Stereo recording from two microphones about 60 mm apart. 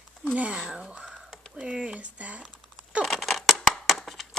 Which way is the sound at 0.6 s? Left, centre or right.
Centre.